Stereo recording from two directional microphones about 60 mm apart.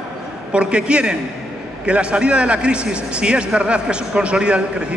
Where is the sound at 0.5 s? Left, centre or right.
Centre.